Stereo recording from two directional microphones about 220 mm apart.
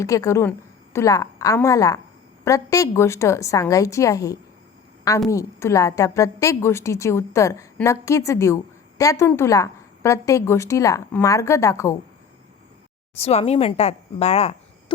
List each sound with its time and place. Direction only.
0.0 s a woman's voice: 15° left (ahead or behind)
13.1 s speech: 30° left (ahead or behind)